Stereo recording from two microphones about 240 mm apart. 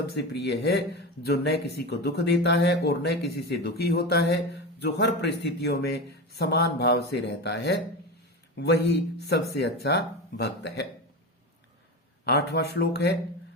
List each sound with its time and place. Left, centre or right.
0.4 s speech: left
12.3 s speech: left